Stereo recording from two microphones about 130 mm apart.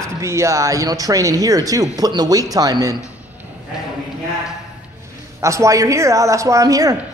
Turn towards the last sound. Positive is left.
turn(degrees=-25)  # may be behind; listen again after turning